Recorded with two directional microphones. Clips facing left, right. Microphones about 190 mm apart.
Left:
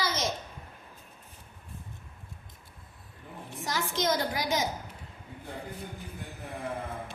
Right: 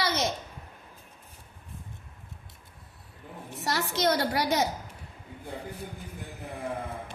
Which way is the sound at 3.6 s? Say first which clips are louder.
Right 3 dB; 70° right (ahead or behind).